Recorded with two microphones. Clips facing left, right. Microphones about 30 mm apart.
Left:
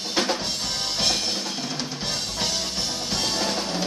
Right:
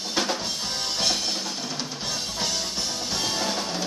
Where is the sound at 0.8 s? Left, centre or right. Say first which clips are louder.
Left 1 dB; centre.